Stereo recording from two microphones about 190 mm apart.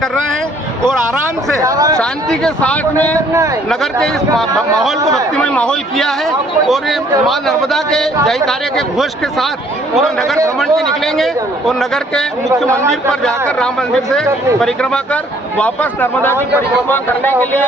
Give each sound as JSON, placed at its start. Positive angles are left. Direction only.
{"t": 1.6, "sound": "speech", "side_deg": -15}
{"t": 2.0, "sound": "speech", "side_deg": 5}
{"t": 5.3, "sound": "speech", "side_deg": 5}